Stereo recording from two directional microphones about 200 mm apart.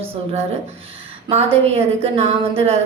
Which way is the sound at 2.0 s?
30° right (ahead or behind).